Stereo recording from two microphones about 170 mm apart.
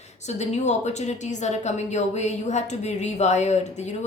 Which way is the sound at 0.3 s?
40° left (ahead or behind).